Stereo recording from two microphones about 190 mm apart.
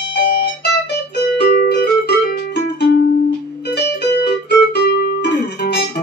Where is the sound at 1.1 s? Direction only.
60° left (ahead or behind).